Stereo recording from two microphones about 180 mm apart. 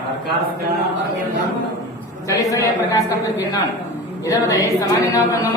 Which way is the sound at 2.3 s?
20° left (ahead or behind).